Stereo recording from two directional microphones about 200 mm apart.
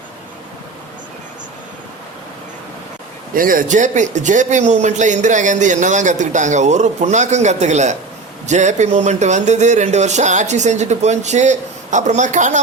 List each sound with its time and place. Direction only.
3.3 s speech: 45° right (ahead or behind)